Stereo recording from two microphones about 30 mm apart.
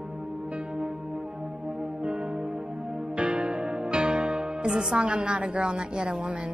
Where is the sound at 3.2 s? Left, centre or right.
Right.